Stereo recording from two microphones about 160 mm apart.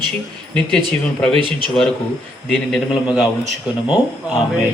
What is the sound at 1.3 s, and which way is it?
Speech, 30° right (ahead or behind).